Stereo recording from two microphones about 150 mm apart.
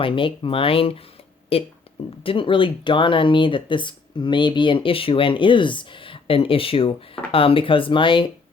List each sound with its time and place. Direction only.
0.0 s speech: 35° left (ahead or behind)